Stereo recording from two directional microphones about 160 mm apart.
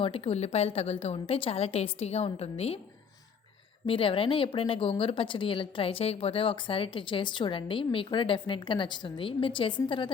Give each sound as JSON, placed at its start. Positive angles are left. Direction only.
{"t": 0.0, "sound": "speech", "side_deg": 40}
{"t": 3.8, "sound": "speech", "side_deg": 35}